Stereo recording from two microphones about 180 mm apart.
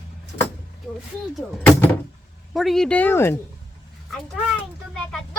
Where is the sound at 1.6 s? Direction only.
10° left (ahead or behind).